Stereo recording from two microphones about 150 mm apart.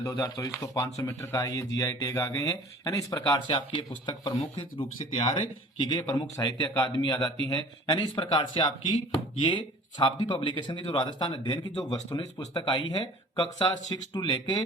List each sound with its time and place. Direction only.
0.0 s speech: 20° left (ahead or behind)
4.4 s speech: 45° left (ahead or behind)